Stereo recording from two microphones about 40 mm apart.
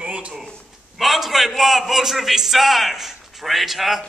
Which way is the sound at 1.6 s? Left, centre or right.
Centre.